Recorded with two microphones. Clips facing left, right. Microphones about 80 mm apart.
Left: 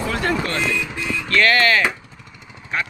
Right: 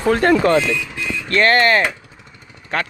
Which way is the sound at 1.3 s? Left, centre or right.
Right.